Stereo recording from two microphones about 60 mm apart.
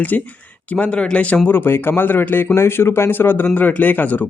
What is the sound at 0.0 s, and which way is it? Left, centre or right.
Speech, left.